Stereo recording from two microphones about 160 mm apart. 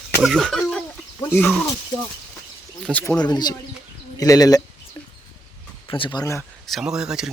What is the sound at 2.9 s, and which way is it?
Speech, 5° left (ahead or behind).